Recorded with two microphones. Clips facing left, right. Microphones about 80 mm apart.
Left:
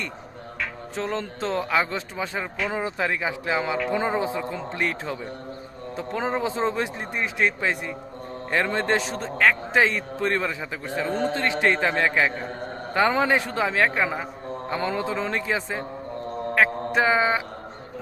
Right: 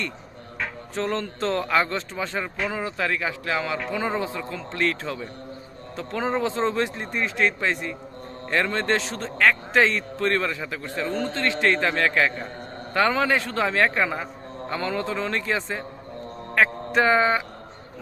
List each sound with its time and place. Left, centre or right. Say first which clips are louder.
0.9 s music: right 2 dB; centre
1.5 s a man's voice: even; centre